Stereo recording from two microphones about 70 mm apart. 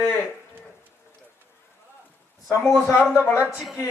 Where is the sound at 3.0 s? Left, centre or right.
Centre.